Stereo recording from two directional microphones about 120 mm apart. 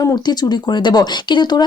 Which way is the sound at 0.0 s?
35° left (ahead or behind).